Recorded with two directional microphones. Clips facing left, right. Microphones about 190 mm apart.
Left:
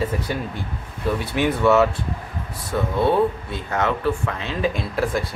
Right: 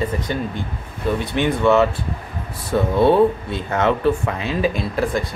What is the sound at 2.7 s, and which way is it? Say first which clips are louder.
Speech: right 4 dB; 30° right (ahead or behind).